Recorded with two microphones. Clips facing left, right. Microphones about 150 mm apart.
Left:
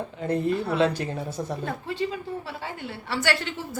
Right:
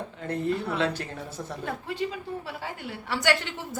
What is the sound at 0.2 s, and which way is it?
Speech, 15° left (ahead or behind).